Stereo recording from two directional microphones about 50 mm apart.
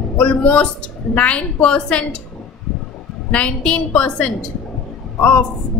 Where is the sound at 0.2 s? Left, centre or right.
Left.